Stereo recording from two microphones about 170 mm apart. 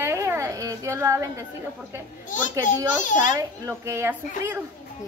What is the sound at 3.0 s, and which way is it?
Speech, 50° left (ahead or behind).